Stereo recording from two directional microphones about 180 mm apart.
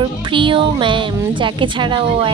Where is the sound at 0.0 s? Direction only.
30° right (ahead or behind).